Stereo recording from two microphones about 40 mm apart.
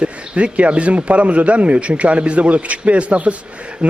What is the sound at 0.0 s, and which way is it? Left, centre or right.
A man's voice, right.